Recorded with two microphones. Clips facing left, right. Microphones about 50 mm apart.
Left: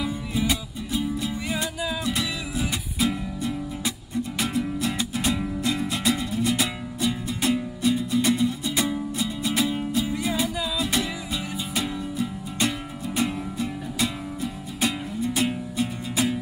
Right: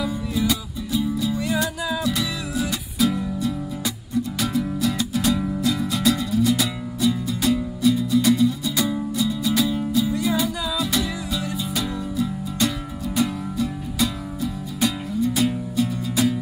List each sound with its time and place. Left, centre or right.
0.0 s music: left
1.4 s music: centre